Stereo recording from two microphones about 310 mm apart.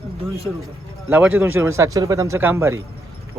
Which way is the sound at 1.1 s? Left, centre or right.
Centre.